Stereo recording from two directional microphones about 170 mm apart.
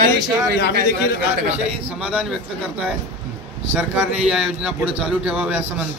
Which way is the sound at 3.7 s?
10° right (ahead or behind).